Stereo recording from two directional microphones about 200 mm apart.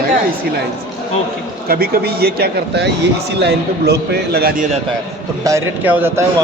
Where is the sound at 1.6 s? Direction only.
50° right (ahead or behind).